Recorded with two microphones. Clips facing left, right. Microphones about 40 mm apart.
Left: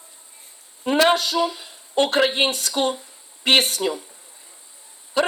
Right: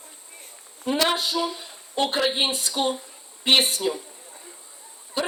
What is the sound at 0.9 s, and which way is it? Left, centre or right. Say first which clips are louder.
Speech: left 6 dB; left.